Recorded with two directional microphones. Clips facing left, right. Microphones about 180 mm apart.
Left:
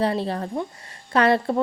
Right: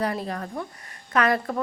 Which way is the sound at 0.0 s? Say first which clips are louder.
Left 4 dB; 30° left (ahead or behind).